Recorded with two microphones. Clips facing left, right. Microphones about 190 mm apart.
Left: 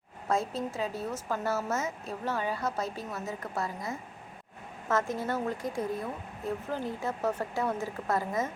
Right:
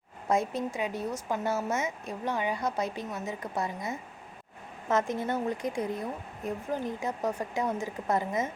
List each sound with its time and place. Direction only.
0.3 s speech: 20° right (ahead or behind)